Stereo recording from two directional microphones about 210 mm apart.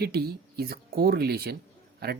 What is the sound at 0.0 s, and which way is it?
Speech, 50° right (ahead or behind).